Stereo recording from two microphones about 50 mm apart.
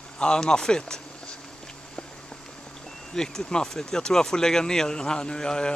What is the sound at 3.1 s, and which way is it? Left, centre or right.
Speech, centre.